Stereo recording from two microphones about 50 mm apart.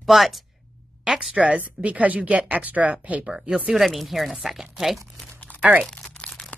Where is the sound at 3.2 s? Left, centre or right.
Centre.